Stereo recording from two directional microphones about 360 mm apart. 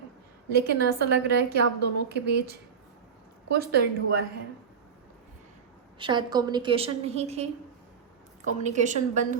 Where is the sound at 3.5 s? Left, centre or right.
Right.